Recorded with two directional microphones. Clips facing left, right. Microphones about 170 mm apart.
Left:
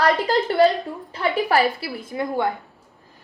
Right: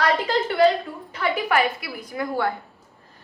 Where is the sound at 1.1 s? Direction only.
30° left (ahead or behind).